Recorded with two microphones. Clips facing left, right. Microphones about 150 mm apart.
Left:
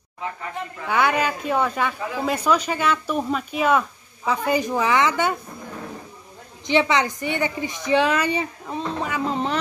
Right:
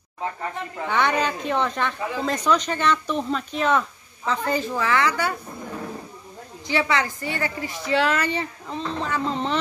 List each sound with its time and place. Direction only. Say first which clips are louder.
0.8 s speech: left 1 dB; 5° left (ahead or behind)
6.7 s speech: left 4 dB; 20° left (ahead or behind)